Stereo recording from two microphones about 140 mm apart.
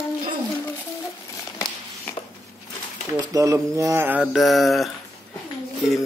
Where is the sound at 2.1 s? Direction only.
15° left (ahead or behind).